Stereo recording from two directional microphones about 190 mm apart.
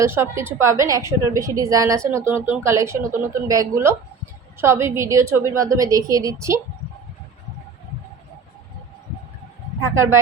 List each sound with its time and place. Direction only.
0.0 s a woman's voice: 15° right (ahead or behind)
9.8 s a woman's voice: 15° right (ahead or behind)